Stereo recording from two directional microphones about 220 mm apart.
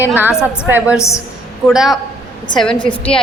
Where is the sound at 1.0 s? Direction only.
15° left (ahead or behind).